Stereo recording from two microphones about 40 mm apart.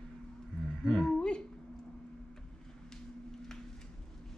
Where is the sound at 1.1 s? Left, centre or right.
Left.